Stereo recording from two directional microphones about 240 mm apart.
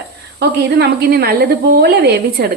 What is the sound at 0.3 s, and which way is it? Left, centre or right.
Speech, right.